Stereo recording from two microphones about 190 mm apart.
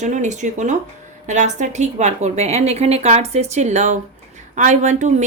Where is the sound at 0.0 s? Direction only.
40° right (ahead or behind).